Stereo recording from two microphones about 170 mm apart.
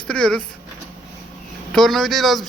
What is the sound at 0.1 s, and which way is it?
Speech, 5° left (ahead or behind).